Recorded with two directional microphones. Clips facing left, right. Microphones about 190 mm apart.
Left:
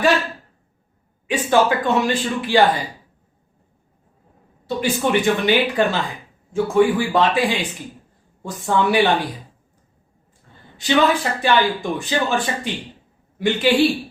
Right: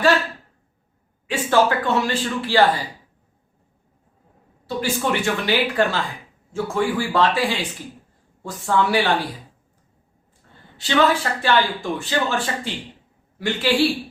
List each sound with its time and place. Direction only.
1.3 s speech: 15° left (ahead or behind)
4.6 s speech: 20° left (ahead or behind)
10.8 s speech: 15° left (ahead or behind)